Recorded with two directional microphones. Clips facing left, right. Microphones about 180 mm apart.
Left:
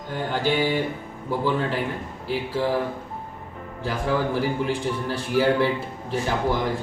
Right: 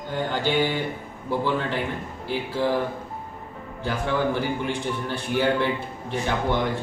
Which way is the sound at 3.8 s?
Centre (ahead or behind).